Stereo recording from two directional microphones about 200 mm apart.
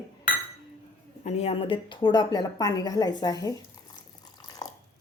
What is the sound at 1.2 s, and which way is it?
A woman's voice, 35° left (ahead or behind).